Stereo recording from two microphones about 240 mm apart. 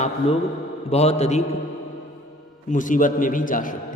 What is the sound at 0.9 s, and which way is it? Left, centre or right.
Speech, left.